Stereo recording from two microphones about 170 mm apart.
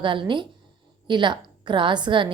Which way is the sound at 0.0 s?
30° right (ahead or behind).